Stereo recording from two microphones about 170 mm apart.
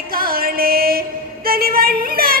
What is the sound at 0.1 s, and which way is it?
Music, 60° right (ahead or behind).